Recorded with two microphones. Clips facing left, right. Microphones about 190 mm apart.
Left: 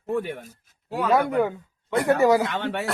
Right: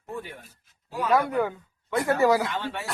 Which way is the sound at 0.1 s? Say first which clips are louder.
Left 10 dB; 70° left (ahead or behind).